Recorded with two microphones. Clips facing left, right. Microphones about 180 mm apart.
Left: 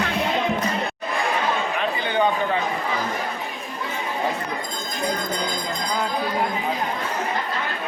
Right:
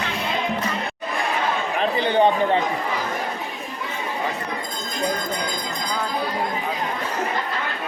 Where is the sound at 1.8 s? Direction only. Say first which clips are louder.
Right 6 dB; 30° right (ahead or behind).